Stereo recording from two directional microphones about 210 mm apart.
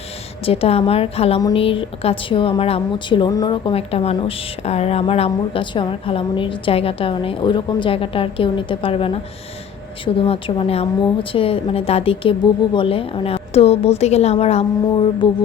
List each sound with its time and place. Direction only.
0.4 s a woman's voice: 30° left (ahead or behind)